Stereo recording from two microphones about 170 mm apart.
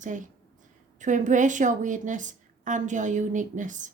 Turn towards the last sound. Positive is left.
turn(degrees=-50)  # may be behind; listen again after turning